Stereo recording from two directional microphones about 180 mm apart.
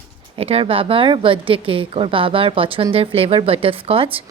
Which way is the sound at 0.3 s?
35° right (ahead or behind).